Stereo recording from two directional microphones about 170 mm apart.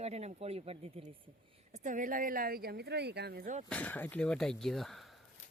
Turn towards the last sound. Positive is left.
turn(degrees=0)  # may be behind; listen again after turning